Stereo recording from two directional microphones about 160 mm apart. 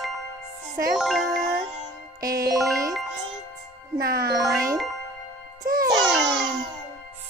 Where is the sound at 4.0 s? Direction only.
70° right (ahead or behind).